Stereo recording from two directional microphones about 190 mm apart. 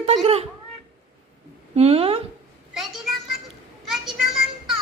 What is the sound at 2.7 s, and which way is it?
Speech, centre (ahead or behind).